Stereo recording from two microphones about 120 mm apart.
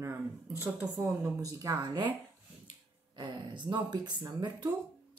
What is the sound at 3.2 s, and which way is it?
Speech, 40° right (ahead or behind).